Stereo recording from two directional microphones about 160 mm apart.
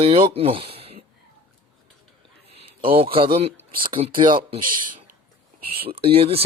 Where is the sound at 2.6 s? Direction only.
35° right (ahead or behind).